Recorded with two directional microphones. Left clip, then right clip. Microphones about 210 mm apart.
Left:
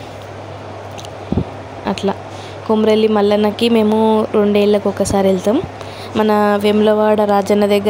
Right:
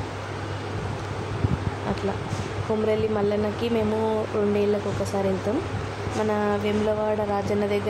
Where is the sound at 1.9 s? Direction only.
50° left (ahead or behind).